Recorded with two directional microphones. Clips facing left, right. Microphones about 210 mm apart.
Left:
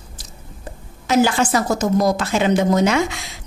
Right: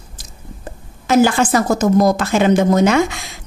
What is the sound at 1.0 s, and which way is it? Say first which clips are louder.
A woman's voice: right 3 dB; 50° right (ahead or behind).